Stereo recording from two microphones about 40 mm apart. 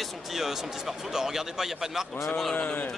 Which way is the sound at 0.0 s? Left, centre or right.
Centre.